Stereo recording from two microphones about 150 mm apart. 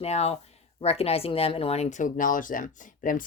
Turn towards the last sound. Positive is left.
turn(degrees=60)  # may be behind; listen again after turning